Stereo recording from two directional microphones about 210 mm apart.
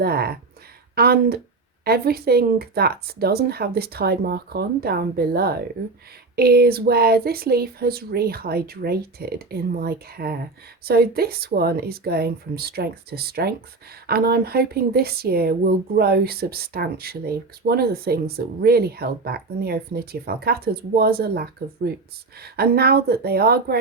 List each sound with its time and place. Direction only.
0.0 s speech: 45° right (ahead or behind)